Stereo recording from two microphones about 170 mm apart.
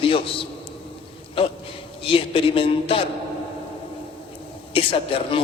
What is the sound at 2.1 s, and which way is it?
Speech, 35° left (ahead or behind).